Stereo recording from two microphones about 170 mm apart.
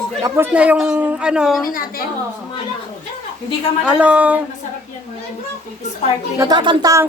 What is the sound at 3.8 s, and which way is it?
Speech, 5° right (ahead or behind).